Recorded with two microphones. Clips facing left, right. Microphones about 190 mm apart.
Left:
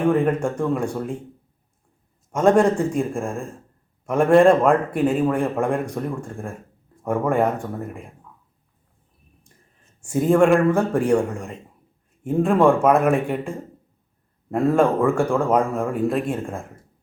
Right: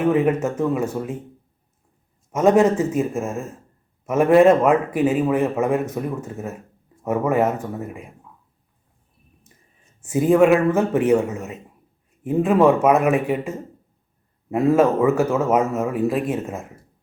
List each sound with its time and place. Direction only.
0.0 s a man's voice: 5° right (ahead or behind)
2.3 s a man's voice: 5° right (ahead or behind)
10.0 s a man's voice: 5° right (ahead or behind)